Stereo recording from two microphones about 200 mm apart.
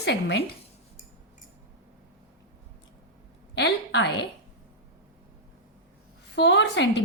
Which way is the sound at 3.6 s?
60° left (ahead or behind).